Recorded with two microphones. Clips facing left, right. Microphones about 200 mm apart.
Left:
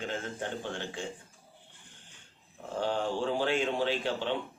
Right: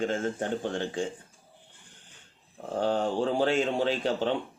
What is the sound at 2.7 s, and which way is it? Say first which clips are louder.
A man's voice: right 4 dB; 45° right (ahead or behind).